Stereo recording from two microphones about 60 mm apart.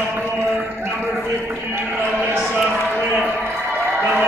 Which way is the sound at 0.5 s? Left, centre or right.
Right.